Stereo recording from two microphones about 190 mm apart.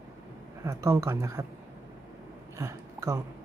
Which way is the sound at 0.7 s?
15° right (ahead or behind).